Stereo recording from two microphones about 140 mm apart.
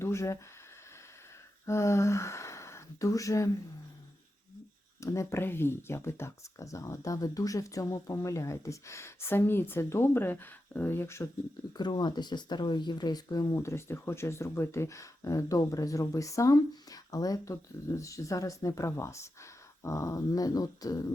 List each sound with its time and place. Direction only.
0.0 s speech: 20° left (ahead or behind)
1.6 s speech: 20° left (ahead or behind)
4.9 s speech: 20° left (ahead or behind)
11.8 s speech: 30° left (ahead or behind)